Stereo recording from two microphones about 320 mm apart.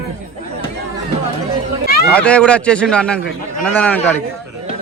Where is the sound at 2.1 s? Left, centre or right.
Centre.